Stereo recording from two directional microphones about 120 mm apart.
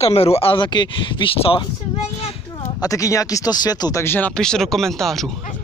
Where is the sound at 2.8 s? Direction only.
25° left (ahead or behind).